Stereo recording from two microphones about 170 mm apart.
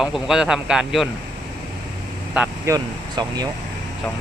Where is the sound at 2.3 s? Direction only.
10° right (ahead or behind).